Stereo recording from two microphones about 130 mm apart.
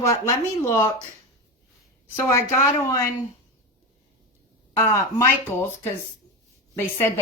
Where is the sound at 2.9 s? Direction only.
25° left (ahead or behind).